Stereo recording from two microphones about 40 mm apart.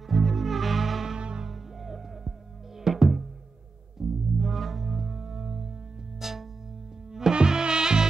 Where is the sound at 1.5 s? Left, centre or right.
Centre.